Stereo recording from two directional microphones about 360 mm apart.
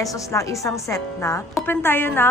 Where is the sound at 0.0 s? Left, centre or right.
Centre.